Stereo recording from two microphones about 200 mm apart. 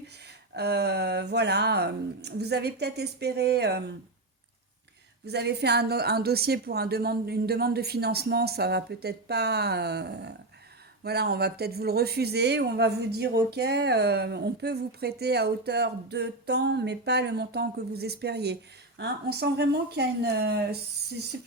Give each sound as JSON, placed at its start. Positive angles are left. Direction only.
{"t": 0.3, "sound": "speech", "side_deg": -55}
{"t": 5.2, "sound": "a woman's voice", "side_deg": -55}